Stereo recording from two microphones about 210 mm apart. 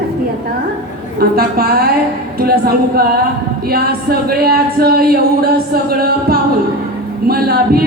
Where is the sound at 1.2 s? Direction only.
45° right (ahead or behind).